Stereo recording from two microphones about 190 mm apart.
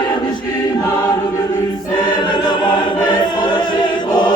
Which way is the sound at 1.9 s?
25° left (ahead or behind).